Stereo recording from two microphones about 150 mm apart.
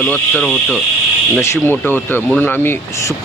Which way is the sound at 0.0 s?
5° left (ahead or behind).